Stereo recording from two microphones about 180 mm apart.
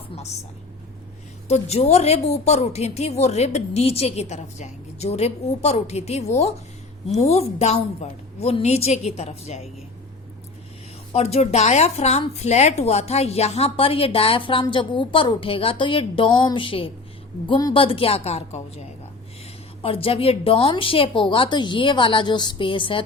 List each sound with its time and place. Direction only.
1.5 s a woman's voice: 35° left (ahead or behind)
11.1 s a woman's voice: 35° left (ahead or behind)
19.8 s a woman's voice: 30° left (ahead or behind)